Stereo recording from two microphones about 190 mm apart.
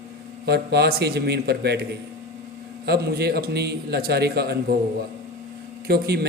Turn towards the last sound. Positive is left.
turn(degrees=-55)  # may be behind; listen again after turning